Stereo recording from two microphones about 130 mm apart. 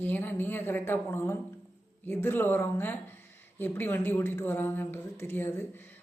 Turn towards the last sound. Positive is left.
turn(degrees=15)  # may be behind; listen again after turning